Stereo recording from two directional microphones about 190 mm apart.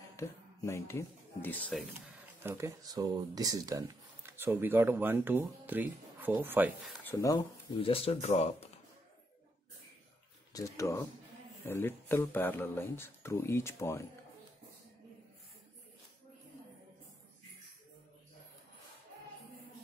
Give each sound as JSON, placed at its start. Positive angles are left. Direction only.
{"t": 0.1, "sound": "speech", "side_deg": 15}
{"t": 2.4, "sound": "speech", "side_deg": -15}
{"t": 7.1, "sound": "speech", "side_deg": 20}
{"t": 10.5, "sound": "speech", "side_deg": 15}